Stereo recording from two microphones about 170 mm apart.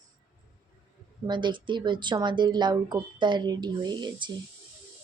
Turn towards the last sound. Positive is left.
turn(degrees=-25)  # may be behind; listen again after turning